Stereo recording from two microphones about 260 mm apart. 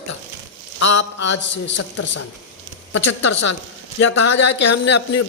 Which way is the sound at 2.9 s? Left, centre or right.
Left.